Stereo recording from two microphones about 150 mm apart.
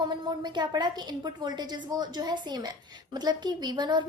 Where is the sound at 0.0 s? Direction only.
30° right (ahead or behind).